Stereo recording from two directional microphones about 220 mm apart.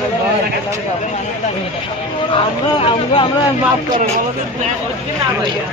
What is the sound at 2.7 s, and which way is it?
Speech, 25° left (ahead or behind).